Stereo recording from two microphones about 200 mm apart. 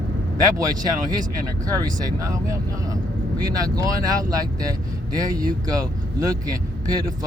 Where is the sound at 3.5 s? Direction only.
20° right (ahead or behind).